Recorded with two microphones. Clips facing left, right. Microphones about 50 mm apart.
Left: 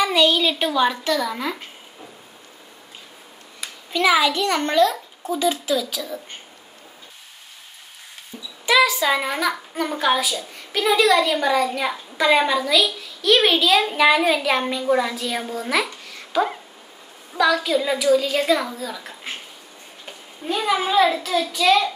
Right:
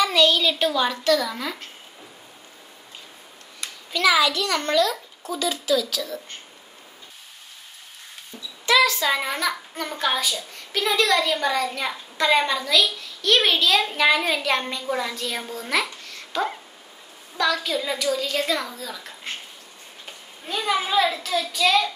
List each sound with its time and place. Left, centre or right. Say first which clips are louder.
0.0 s a woman's voice: left 1 dB; centre
3.9 s a child's voice: left 2 dB; left
8.6 s a child's voice: left 2 dB; centre